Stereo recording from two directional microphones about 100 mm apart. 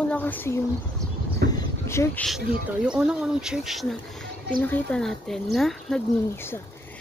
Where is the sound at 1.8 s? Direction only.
25° left (ahead or behind).